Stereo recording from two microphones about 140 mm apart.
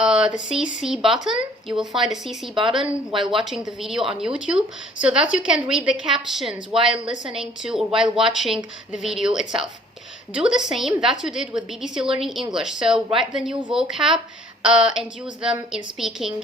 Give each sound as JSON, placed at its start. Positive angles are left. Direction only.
{"t": 0.0, "sound": "speech", "side_deg": -5}
{"t": 2.8, "sound": "speech", "side_deg": -35}
{"t": 3.4, "sound": "a woman's voice", "side_deg": -5}